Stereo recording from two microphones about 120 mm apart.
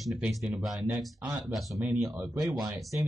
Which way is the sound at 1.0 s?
Centre (ahead or behind).